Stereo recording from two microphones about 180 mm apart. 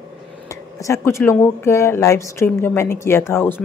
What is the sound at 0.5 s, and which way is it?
Speech, 15° left (ahead or behind).